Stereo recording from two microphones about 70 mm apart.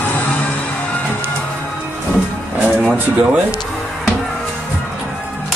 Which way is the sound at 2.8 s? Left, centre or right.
Centre.